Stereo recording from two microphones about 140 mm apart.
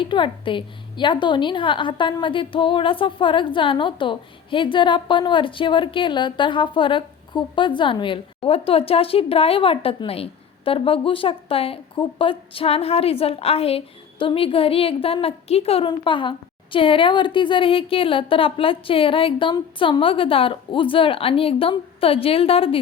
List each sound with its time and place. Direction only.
0.0 s a woman's voice: 35° left (ahead or behind)